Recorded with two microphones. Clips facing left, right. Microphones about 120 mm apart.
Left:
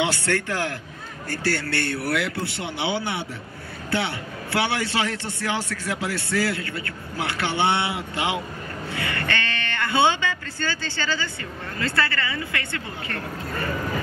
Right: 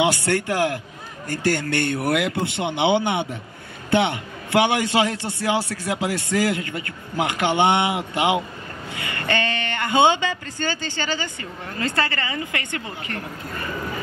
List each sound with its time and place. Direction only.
0.0 s a man's voice: 15° right (ahead or behind)